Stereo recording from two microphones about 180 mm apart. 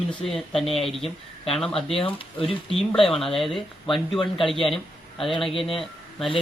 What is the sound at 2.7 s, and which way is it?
Speech, centre (ahead or behind).